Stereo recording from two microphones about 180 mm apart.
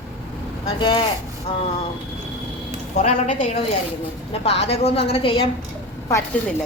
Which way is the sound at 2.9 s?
45° left (ahead or behind).